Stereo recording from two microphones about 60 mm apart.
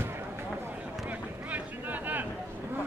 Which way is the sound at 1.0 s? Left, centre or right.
Right.